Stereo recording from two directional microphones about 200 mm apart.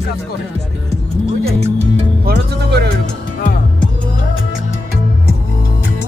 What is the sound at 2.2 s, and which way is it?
Music, 55° right (ahead or behind).